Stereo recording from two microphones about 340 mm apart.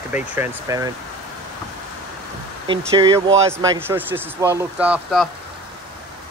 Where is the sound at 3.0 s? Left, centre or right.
Centre.